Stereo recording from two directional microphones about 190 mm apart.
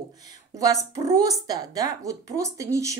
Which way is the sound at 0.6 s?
15° right (ahead or behind).